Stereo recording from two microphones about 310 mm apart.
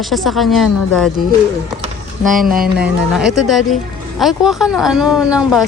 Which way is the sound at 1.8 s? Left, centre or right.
Right.